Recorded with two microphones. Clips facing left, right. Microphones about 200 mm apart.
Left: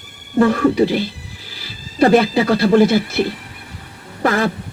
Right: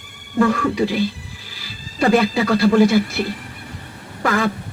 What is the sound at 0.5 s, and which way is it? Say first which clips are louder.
Speech: left 5 dB; 40° left (ahead or behind).